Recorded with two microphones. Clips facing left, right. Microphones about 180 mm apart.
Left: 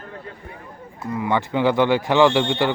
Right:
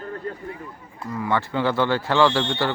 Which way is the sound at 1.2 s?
15° left (ahead or behind).